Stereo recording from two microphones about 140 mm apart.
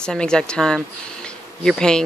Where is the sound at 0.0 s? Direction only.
5° left (ahead or behind).